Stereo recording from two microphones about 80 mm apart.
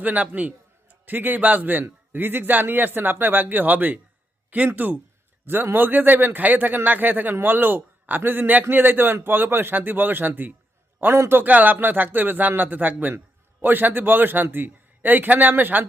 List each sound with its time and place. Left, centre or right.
0.0 s a man's voice: centre